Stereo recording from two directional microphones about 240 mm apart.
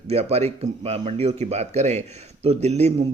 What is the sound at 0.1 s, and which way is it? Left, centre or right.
Speech, right.